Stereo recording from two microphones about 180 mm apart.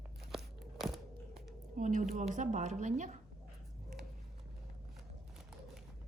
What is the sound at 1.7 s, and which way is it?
A woman's voice, 45° right (ahead or behind).